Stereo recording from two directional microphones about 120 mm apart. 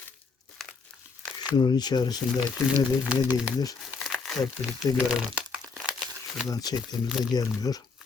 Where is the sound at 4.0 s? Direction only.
Centre (ahead or behind).